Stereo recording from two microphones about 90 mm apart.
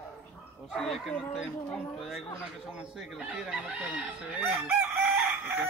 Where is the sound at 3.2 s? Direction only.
10° right (ahead or behind).